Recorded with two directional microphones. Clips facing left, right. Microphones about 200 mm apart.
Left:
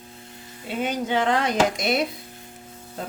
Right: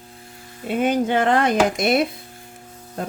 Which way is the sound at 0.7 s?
55° right (ahead or behind).